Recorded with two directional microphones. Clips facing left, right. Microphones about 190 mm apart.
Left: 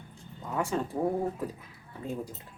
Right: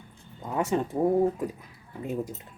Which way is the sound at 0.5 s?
20° right (ahead or behind).